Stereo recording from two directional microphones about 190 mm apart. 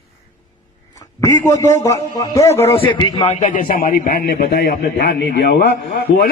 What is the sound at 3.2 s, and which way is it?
A man's voice, 35° left (ahead or behind).